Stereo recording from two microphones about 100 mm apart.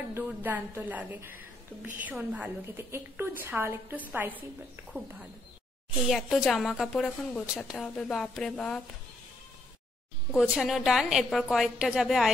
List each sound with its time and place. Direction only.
0.1 s a woman's voice: 15° right (ahead or behind)
2.3 s a woman's voice: 20° right (ahead or behind)
6.0 s a woman's voice: centre (ahead or behind)
10.3 s a woman's voice: 5° right (ahead or behind)